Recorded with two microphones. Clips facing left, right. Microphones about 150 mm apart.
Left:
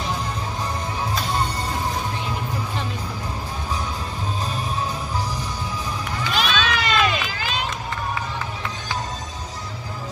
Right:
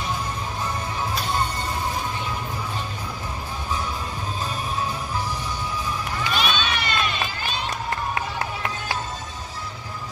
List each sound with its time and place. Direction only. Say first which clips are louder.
6.3 s run: left 3 dB; 90° left